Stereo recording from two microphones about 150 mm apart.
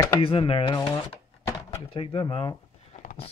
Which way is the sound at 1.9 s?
35° left (ahead or behind).